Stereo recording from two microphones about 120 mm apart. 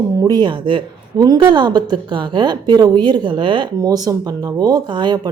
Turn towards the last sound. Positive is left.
turn(degrees=-40)  # may be behind; listen again after turning